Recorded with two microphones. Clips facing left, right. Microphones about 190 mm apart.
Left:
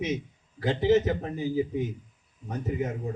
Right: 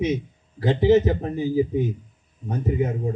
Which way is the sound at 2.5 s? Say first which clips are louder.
Right 6 dB; 30° right (ahead or behind).